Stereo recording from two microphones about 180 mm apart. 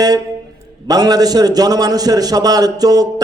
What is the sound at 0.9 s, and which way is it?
A man's voice, 20° right (ahead or behind).